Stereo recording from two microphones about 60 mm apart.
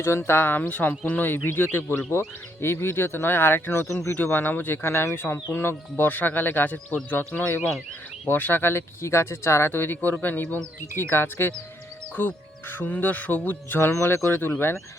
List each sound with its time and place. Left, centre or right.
0.0 s speech: left
0.3 s speech: left
14.3 s speech: left